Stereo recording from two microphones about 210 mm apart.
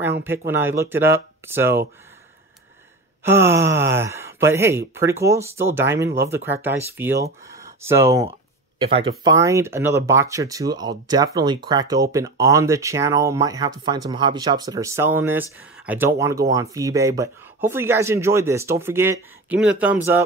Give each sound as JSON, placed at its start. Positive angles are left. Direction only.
{"t": 0.5, "sound": "speech", "side_deg": -10}
{"t": 3.3, "sound": "speech", "side_deg": -10}
{"t": 8.7, "sound": "speech", "side_deg": -25}